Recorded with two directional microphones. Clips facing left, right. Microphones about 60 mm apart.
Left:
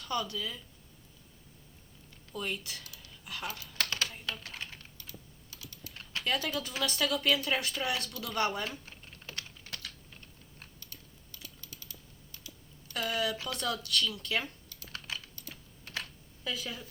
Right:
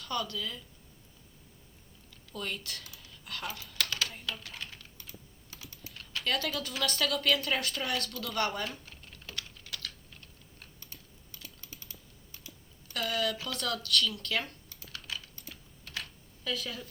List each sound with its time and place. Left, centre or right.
0.0 s speech: centre
2.3 s speech: centre
3.5 s computer keyboard: left
4.5 s typing: left
5.5 s typing: right
5.9 s typing: left
6.2 s speech: centre
9.1 s typing: left
10.8 s typing: right
12.9 s speech: centre
14.8 s typing: left
16.4 s speech: centre